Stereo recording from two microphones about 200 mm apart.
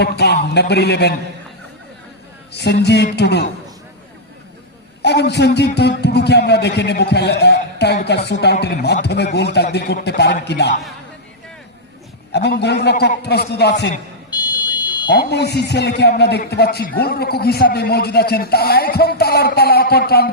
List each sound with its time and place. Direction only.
0.0 s a man's voice: 55° left (ahead or behind)
2.5 s a man's voice: 55° left (ahead or behind)
5.0 s a man's voice: 55° left (ahead or behind)
12.3 s a man's voice: 55° left (ahead or behind)
14.3 s buzzer: 20° left (ahead or behind)
15.1 s a man's voice: 55° left (ahead or behind)